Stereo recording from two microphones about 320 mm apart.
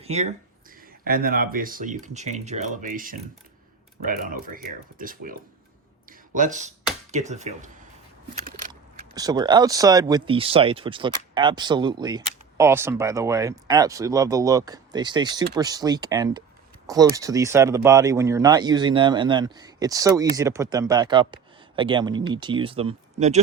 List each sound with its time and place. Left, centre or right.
0.0 s speech: centre
8.4 s a sound: right
9.1 s speech: centre